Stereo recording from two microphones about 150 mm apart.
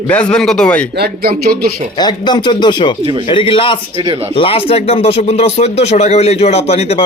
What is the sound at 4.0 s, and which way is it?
Speech, 35° right (ahead or behind).